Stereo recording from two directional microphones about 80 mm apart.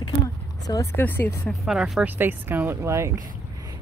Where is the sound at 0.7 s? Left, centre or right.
Left.